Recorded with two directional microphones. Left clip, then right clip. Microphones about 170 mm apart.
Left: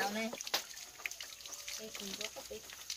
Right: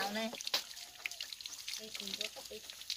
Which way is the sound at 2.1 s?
10° left (ahead or behind).